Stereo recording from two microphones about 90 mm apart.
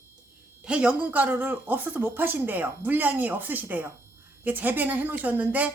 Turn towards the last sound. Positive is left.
turn(degrees=-20)  # may be behind; listen again after turning